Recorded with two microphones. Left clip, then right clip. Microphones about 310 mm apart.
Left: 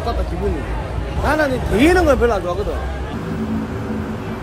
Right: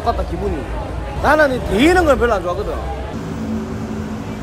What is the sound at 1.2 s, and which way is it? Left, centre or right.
Speech, centre.